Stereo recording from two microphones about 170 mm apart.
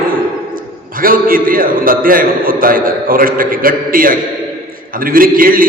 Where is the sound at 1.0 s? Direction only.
55° right (ahead or behind).